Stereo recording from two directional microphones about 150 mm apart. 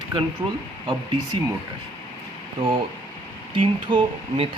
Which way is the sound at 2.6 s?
35° right (ahead or behind).